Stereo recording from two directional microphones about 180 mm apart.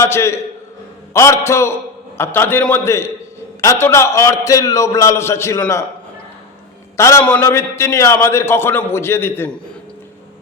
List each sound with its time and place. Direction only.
0.0 s a man's voice: 15° left (ahead or behind)
6.9 s a man's voice: 15° left (ahead or behind)